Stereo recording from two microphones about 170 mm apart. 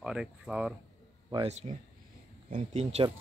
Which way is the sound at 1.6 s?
40° right (ahead or behind).